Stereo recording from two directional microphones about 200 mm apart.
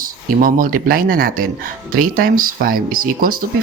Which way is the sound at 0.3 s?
45° right (ahead or behind).